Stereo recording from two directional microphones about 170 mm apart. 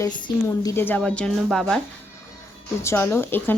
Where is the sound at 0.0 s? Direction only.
20° left (ahead or behind); by 1.8 s 5° left (ahead or behind).